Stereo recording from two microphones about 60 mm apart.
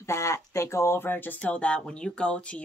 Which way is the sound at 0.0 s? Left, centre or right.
Left.